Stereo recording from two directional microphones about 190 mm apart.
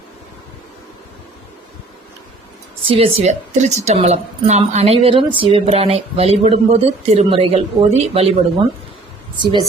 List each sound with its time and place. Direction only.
2.8 s speech: 30° right (ahead or behind)
9.4 s a woman's voice: 25° right (ahead or behind)